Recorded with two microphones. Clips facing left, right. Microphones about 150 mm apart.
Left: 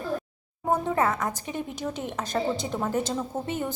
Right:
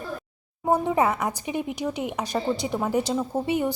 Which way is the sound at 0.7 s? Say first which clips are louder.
Right 3 dB; 15° right (ahead or behind).